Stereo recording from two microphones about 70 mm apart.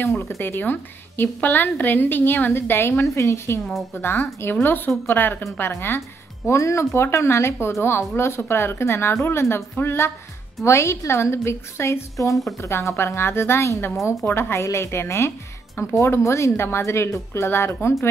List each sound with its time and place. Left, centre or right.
0.4 s a woman's voice: left
4.0 s speech: left